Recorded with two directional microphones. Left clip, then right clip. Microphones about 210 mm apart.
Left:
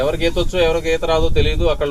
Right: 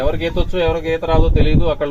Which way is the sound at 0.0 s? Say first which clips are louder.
Left 2 dB; 35° right (ahead or behind).